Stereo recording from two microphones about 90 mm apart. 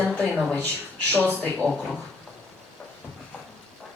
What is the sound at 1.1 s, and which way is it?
Speech, 20° left (ahead or behind).